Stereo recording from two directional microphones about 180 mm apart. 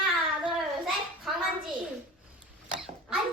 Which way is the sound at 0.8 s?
Centre (ahead or behind).